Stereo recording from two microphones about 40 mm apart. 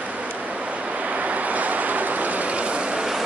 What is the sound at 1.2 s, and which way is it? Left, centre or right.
Vehicle, right.